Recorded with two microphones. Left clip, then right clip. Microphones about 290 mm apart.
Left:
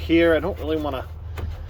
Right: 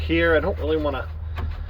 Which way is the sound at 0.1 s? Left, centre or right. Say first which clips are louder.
Left 1 dB; centre.